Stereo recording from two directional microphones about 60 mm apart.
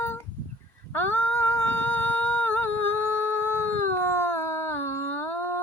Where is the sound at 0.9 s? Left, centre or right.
Left.